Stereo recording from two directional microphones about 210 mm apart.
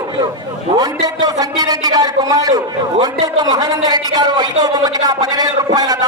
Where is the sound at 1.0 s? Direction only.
15° right (ahead or behind).